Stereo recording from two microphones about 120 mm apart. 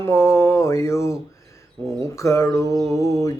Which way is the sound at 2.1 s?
25° left (ahead or behind).